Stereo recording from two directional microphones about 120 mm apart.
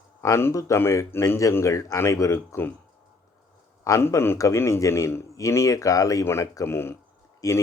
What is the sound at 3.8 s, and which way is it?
A man's voice, 25° left (ahead or behind).